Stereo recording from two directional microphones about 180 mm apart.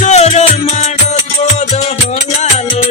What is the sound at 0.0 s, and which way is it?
Music, 40° left (ahead or behind).